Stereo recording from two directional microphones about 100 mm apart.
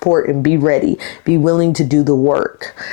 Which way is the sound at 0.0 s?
30° left (ahead or behind).